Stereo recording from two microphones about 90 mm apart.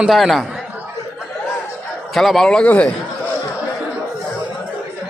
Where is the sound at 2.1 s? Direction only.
Centre (ahead or behind).